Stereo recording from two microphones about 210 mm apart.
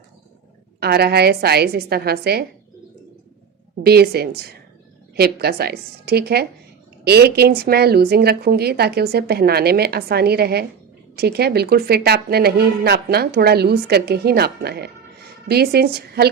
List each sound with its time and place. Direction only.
0.8 s a woman's voice: 50° right (ahead or behind)
3.8 s a woman's voice: 50° right (ahead or behind)